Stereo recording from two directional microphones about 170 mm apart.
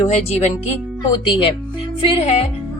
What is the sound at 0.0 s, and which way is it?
A woman's voice, 40° left (ahead or behind).